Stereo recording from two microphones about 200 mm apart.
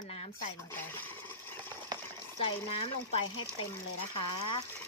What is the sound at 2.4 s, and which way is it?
Speech, 30° left (ahead or behind).